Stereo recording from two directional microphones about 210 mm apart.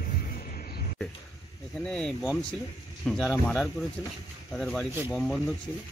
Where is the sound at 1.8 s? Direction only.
5° left (ahead or behind).